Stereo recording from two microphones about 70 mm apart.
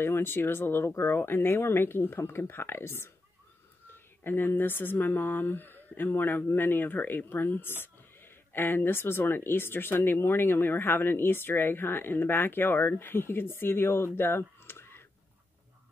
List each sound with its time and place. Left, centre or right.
0.0 s speech: left
4.2 s speech: left